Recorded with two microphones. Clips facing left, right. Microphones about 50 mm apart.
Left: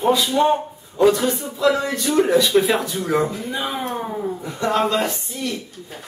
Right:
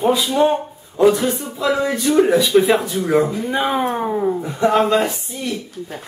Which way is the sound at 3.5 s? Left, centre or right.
Right.